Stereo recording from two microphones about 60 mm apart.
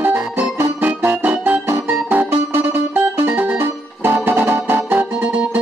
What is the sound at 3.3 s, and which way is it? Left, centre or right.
Music, right.